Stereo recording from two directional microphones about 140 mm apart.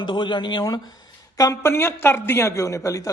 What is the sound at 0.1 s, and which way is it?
Speech, 35° left (ahead or behind).